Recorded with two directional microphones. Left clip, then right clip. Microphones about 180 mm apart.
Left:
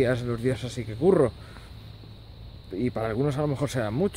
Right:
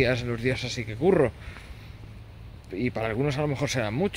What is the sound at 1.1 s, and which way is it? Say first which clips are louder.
Speech: left 1 dB; centre (ahead or behind).